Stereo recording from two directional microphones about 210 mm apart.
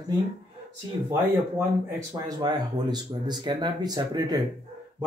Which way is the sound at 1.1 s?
15° right (ahead or behind).